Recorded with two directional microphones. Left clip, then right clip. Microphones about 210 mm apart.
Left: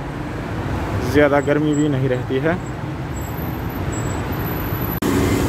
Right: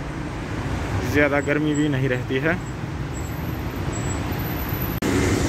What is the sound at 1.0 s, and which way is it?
Speech, 15° left (ahead or behind).